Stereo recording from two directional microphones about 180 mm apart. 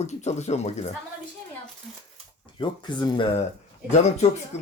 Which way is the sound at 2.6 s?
25° left (ahead or behind).